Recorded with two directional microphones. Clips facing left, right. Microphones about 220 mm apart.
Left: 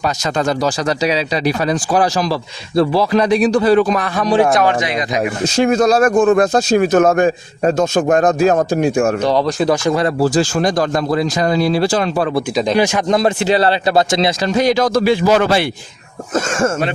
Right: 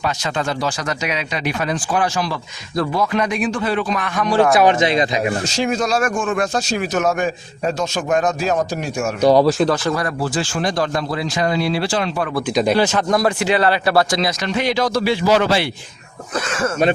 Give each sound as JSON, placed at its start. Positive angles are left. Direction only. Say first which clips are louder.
{"t": 0.0, "sound": "speech", "louder": "left 4 dB", "side_deg": 40}
{"t": 4.6, "sound": "speech", "louder": "right 2 dB", "side_deg": -25}
{"t": 5.5, "sound": "speech", "louder": "left 9 dB", "side_deg": 55}
{"t": 5.9, "sound": "speech", "louder": "left 8 dB", "side_deg": 35}
{"t": 6.5, "sound": "a man's voice", "louder": "left 8 dB", "side_deg": 50}
{"t": 9.2, "sound": "speech", "louder": "right 3 dB", "side_deg": -10}
{"t": 9.6, "sound": "speech", "louder": "left 4 dB", "side_deg": 15}
{"t": 10.2, "sound": "speech", "louder": "left 7 dB", "side_deg": 40}
{"t": 12.7, "sound": "speech", "louder": "left 2 dB", "side_deg": 15}
{"t": 13.1, "sound": "speech", "louder": "left 4 dB", "side_deg": 25}
{"t": 13.8, "sound": "a man's voice", "louder": "left 3 dB", "side_deg": 25}